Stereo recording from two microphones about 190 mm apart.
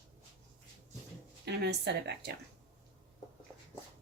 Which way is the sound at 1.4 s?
60° right (ahead or behind).